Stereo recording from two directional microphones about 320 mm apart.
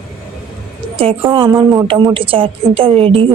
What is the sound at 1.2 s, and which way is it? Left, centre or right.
A woman's voice, centre.